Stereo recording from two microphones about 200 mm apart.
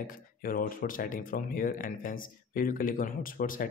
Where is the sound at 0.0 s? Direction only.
45° left (ahead or behind).